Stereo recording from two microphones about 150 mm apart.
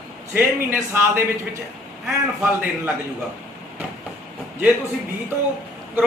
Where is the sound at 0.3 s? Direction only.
15° right (ahead or behind).